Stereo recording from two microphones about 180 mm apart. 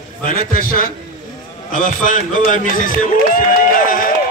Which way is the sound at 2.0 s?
45° left (ahead or behind).